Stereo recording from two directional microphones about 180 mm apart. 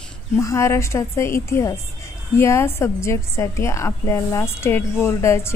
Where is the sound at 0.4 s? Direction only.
15° left (ahead or behind).